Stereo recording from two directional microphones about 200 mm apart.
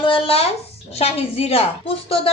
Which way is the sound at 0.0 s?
25° left (ahead or behind).